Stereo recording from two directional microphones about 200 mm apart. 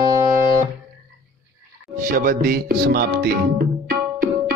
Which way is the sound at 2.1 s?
45° right (ahead or behind).